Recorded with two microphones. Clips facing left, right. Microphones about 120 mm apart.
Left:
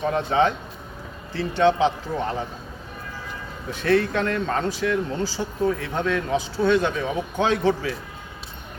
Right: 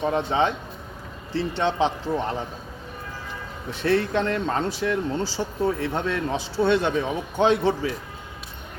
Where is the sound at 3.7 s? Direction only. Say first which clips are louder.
Left 1 dB; 25° right (ahead or behind).